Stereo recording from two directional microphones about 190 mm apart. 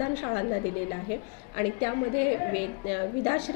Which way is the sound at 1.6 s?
20° left (ahead or behind).